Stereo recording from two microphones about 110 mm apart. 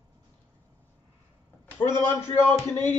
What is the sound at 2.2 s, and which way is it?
Speech, 25° left (ahead or behind).